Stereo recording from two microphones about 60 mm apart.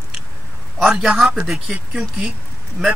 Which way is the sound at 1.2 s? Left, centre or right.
Centre.